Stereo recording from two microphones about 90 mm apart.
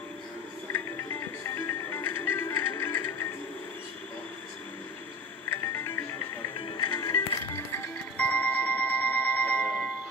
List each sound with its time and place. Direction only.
0.7 s music: 30° left (ahead or behind)
5.7 s music: 30° left (ahead or behind)
6.6 s music: 65° left (ahead or behind)
7.1 s music: 30° left (ahead or behind)
8.2 s a sound: 15° left (ahead or behind)